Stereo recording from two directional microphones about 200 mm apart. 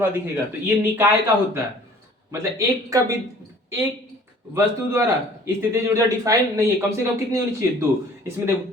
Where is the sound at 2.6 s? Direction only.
15° right (ahead or behind).